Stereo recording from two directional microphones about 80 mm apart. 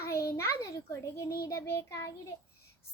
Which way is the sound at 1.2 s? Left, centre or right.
Left.